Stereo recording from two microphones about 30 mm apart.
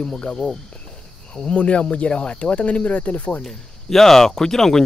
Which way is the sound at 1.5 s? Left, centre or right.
Left.